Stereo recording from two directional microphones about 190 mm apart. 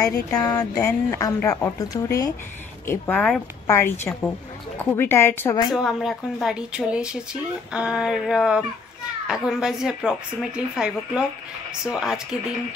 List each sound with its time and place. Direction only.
0.3 s speech: 20° left (ahead or behind)
5.7 s speech: centre (ahead or behind)